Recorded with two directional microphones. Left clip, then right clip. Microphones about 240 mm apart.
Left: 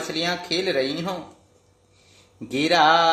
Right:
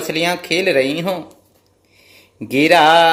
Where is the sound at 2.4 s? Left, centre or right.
Right.